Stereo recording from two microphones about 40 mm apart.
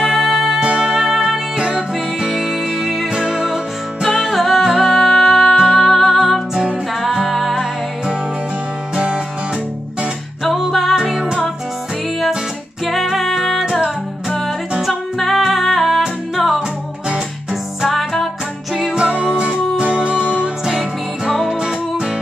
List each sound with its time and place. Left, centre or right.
0.0 s music: right
0.3 s music: centre
0.7 s music: right
0.9 s music: centre
1.6 s music: right
2.1 s music: centre
8.9 s music: right
10.4 s music: centre
12.8 s music: centre
15.1 s music: centre
18.9 s music: right
21.3 s music: centre